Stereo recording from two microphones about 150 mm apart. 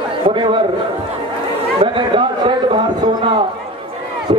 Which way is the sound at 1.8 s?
35° right (ahead or behind).